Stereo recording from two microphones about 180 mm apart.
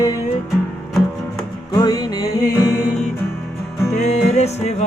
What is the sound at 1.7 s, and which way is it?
Music, 20° left (ahead or behind).